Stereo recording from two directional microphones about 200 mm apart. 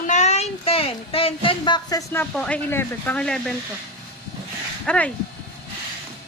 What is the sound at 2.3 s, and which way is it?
Speech, 5° left (ahead or behind).